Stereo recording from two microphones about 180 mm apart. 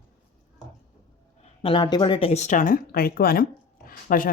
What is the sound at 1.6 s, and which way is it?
Speech, 25° left (ahead or behind).